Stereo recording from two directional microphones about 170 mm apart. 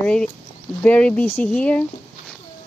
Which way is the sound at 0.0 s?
5° left (ahead or behind).